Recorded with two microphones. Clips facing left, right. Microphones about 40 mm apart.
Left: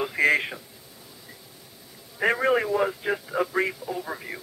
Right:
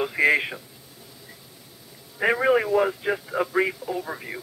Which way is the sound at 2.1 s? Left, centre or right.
Centre.